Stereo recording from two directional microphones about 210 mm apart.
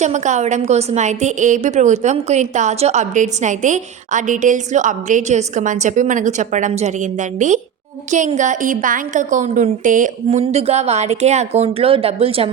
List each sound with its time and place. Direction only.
0.0 s a woman's voice: 35° right (ahead or behind)